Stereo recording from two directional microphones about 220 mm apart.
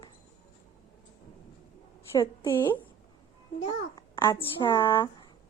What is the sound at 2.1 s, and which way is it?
Speech, 15° left (ahead or behind).